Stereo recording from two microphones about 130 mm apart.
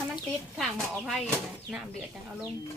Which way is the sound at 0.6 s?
Centre (ahead or behind).